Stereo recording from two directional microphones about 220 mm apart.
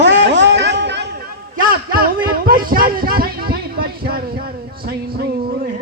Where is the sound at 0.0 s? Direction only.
55° right (ahead or behind).